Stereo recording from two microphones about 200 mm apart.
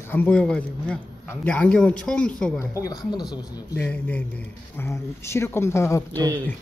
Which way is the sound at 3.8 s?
10° left (ahead or behind).